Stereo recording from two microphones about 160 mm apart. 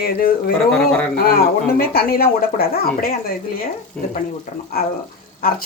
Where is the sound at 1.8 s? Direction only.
75° left (ahead or behind).